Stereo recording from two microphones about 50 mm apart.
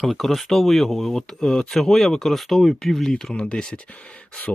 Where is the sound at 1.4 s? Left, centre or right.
Centre.